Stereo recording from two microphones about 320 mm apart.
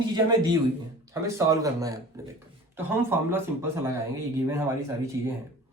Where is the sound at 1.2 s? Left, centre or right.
Centre.